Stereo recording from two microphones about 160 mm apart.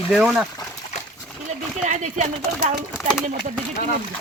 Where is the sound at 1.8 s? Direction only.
50° right (ahead or behind).